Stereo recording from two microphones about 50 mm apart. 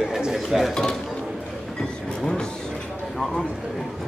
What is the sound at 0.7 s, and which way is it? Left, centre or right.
Speech, centre.